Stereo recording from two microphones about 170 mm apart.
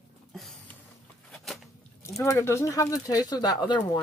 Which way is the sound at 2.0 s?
15° left (ahead or behind).